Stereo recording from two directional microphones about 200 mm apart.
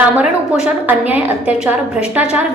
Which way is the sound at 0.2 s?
5° right (ahead or behind).